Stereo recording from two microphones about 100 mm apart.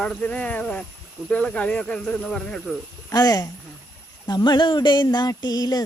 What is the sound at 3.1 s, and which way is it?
Speech, 40° left (ahead or behind).